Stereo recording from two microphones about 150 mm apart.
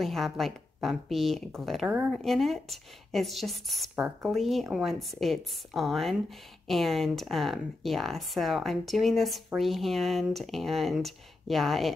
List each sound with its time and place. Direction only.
0.0 s speech: centre (ahead or behind)
3.9 s speech: 15° right (ahead or behind)
4.3 s speech: centre (ahead or behind)